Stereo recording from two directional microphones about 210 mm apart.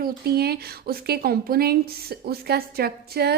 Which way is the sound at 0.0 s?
45° right (ahead or behind).